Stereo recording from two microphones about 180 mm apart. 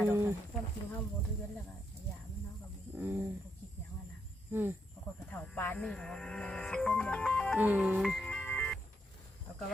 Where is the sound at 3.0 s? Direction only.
10° right (ahead or behind).